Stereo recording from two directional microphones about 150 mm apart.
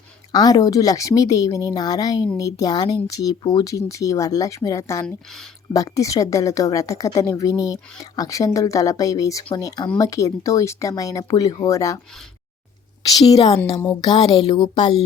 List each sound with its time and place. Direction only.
0.3 s speech: 25° left (ahead or behind)
14.0 s speech: 30° left (ahead or behind)